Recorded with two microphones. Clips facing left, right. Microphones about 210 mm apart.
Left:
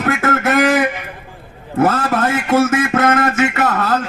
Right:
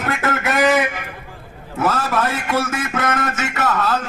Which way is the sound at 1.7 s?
50° left (ahead or behind).